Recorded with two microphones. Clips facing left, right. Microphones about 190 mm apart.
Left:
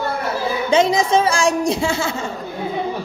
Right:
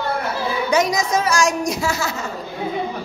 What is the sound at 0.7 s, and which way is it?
A woman's voice, 25° left (ahead or behind).